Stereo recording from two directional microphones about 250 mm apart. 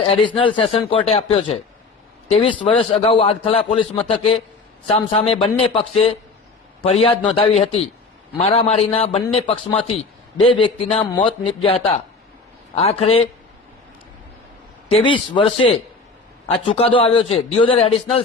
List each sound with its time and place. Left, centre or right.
0.0 s a man's voice: left
14.8 s a man's voice: left